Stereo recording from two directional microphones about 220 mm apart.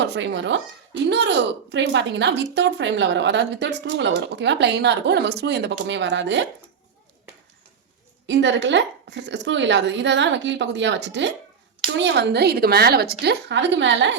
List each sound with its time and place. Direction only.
0.0 s speech: 50° right (ahead or behind)
8.3 s speech: 55° right (ahead or behind)